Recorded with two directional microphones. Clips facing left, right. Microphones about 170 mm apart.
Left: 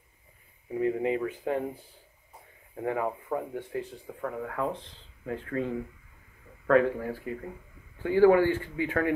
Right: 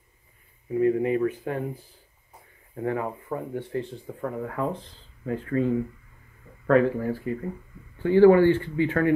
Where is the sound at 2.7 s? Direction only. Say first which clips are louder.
Right 2 dB; 15° left (ahead or behind).